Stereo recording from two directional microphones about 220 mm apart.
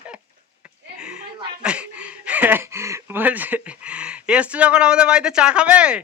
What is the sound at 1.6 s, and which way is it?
Speech, 5° right (ahead or behind).